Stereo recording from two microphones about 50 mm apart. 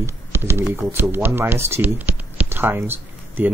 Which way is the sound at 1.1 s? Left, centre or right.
Right.